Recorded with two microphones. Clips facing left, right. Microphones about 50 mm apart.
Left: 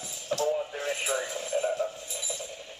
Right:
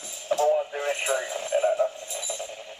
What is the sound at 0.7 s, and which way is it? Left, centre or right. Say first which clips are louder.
Music: right 4 dB; centre.